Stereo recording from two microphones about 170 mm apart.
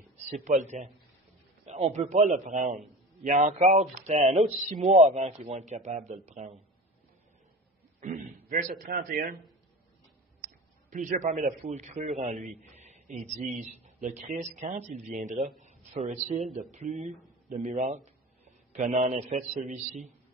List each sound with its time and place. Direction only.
0.3 s a man's voice: 45° right (ahead or behind)
8.0 s a man's voice: 50° right (ahead or behind)
10.4 s a sound: 50° right (ahead or behind)
11.6 s a man's voice: 40° right (ahead or behind)